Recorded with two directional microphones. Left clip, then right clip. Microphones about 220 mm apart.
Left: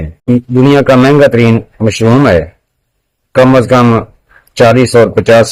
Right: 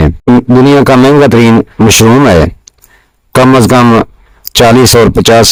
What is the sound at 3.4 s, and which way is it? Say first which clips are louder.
Speech: right 3 dB; 40° right (ahead or behind).